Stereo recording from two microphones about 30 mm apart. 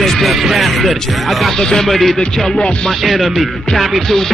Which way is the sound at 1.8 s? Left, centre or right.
Centre.